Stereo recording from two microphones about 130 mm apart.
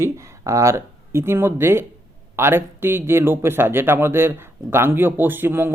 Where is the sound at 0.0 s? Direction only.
25° right (ahead or behind).